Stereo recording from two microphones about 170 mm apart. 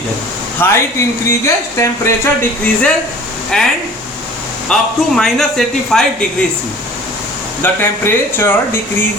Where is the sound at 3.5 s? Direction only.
5° left (ahead or behind).